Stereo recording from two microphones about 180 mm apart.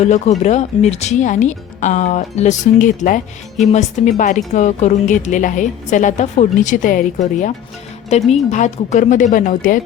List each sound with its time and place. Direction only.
0.0 s a woman's voice: 40° left (ahead or behind)